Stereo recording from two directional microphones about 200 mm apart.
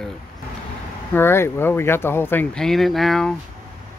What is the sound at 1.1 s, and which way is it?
Speech, 10° left (ahead or behind).